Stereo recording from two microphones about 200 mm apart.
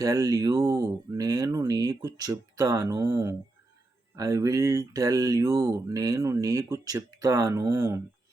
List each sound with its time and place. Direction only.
0.0 s speech: 15° right (ahead or behind)